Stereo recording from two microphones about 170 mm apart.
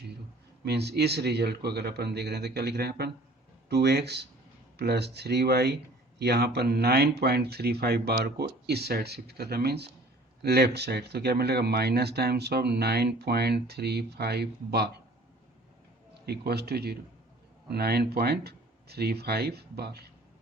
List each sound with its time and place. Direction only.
0.6 s speech: 75° right (ahead or behind)
16.2 s speech: 70° right (ahead or behind)